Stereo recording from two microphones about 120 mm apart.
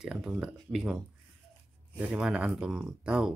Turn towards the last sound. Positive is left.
turn(degrees=-5)  # may be behind; listen again after turning